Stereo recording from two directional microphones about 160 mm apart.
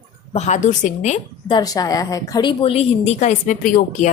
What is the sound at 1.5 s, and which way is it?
A woman's voice, 25° left (ahead or behind).